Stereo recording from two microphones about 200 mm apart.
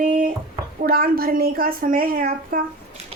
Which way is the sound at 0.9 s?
50° right (ahead or behind).